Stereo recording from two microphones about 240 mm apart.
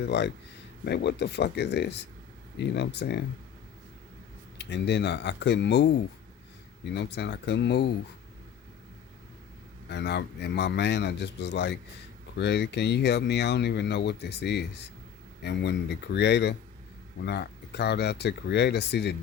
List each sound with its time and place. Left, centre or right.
0.1 s speech: left
4.5 s speech: left
6.9 s speech: left
9.9 s speech: left